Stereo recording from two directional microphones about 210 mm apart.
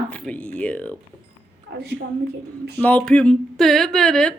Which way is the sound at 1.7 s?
55° right (ahead or behind).